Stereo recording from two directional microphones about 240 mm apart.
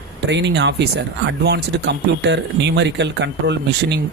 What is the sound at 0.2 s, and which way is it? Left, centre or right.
Speech, right.